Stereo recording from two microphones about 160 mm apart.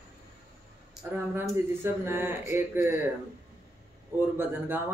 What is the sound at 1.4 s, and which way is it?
Speech, 15° right (ahead or behind).